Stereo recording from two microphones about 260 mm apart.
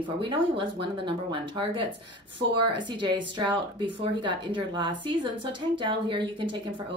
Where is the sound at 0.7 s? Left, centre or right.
Centre.